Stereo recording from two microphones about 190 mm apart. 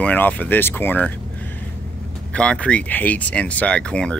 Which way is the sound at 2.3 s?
5° left (ahead or behind).